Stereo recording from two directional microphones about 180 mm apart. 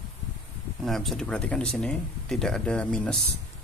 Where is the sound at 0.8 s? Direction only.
Centre (ahead or behind).